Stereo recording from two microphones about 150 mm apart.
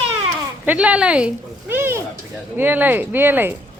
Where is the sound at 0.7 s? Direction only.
10° right (ahead or behind).